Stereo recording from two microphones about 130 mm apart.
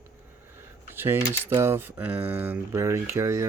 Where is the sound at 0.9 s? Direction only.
15° right (ahead or behind).